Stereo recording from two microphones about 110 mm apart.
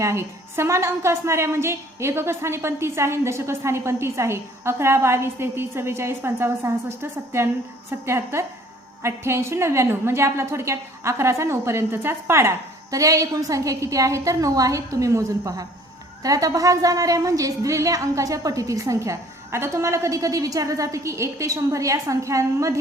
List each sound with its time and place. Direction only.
0.0 s a woman's voice: 25° right (ahead or behind)